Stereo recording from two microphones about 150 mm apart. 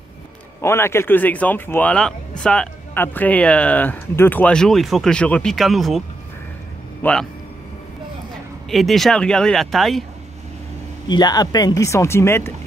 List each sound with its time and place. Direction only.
0.6 s speech: 15° left (ahead or behind)
8.6 s speech: centre (ahead or behind)
11.1 s speech: 25° left (ahead or behind)